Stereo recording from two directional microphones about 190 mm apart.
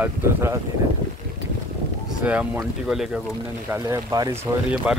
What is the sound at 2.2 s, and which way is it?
A man's voice, 5° right (ahead or behind).